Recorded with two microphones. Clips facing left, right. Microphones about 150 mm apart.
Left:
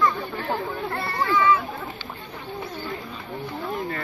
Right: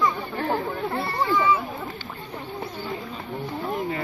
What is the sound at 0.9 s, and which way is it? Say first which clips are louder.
Children playing: left 1 dB; centre (ahead or behind).